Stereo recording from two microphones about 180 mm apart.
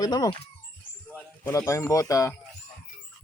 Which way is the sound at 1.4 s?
15° left (ahead or behind).